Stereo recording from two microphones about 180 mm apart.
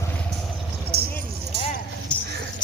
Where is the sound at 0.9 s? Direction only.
65° right (ahead or behind).